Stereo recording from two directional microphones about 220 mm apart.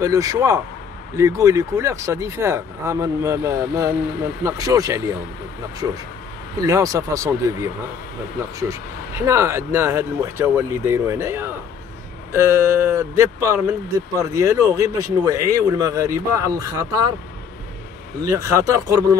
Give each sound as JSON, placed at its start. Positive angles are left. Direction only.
{"t": 0.0, "sound": "speech", "side_deg": -15}
{"t": 18.3, "sound": "speech", "side_deg": -15}